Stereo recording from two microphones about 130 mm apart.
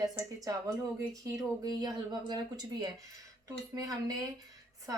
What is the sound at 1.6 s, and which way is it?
Speech, 30° right (ahead or behind).